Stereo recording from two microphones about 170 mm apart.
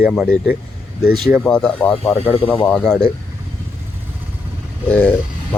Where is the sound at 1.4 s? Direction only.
5° left (ahead or behind).